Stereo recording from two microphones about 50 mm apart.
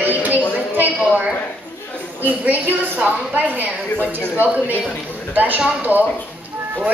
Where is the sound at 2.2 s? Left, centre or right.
Right.